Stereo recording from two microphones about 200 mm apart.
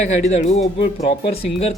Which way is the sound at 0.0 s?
35° left (ahead or behind).